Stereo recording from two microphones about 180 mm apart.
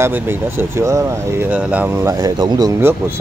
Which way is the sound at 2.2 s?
25° right (ahead or behind).